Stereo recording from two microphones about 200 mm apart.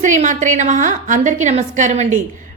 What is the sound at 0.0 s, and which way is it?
A woman's voice, 40° right (ahead or behind).